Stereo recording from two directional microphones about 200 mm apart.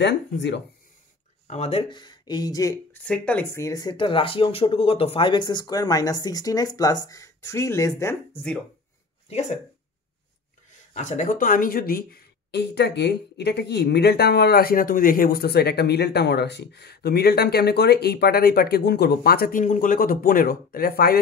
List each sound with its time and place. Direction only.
0.0 s speech: 60° left (ahead or behind)
1.5 s speech: 30° left (ahead or behind); by 8.2 s 15° left (ahead or behind)
9.3 s speech: 30° left (ahead or behind)
10.7 s speech: 35° left (ahead or behind)